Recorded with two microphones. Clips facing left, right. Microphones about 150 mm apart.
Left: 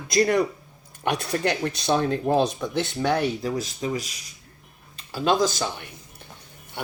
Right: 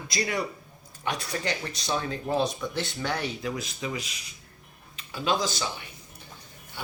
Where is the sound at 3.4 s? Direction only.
35° left (ahead or behind).